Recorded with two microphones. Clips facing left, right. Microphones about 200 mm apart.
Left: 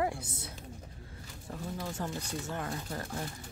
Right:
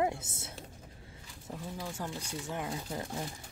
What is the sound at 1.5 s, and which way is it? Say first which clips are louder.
Speech: left 2 dB; 10° right (ahead or behind).